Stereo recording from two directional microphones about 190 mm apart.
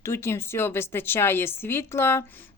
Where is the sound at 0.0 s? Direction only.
15° left (ahead or behind).